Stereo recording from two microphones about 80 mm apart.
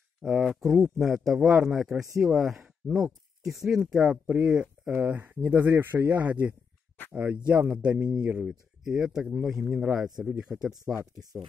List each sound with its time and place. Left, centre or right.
0.2 s speech: centre